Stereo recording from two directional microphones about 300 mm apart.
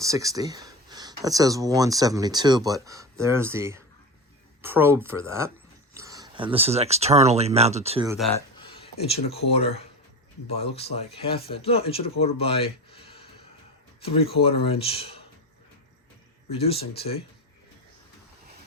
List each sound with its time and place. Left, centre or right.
0.0 s speech: centre
8.6 s a sound: centre
9.5 s speech: centre
14.4 s speech: centre
16.5 s speech: centre